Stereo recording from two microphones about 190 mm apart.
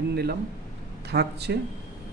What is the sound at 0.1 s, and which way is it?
Speech, 55° right (ahead or behind).